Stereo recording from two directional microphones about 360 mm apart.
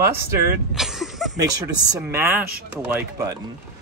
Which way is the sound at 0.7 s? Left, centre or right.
Centre.